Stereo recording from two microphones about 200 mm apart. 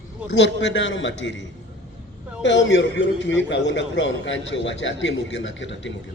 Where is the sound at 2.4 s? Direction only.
65° left (ahead or behind).